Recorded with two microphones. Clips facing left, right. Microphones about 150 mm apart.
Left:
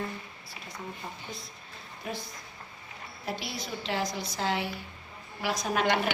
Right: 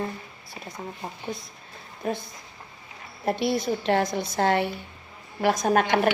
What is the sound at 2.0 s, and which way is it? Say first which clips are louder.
Speech: right 8 dB; 45° right (ahead or behind).